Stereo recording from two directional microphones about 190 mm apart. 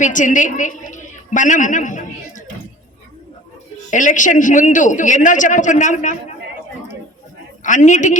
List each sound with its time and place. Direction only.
0.0 s a woman's voice: 40° left (ahead or behind)
3.8 s a man's voice: 40° left (ahead or behind)
7.6 s a man's voice: 40° left (ahead or behind)